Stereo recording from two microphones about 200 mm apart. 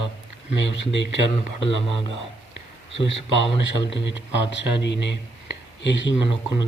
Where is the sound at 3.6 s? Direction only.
65° left (ahead or behind).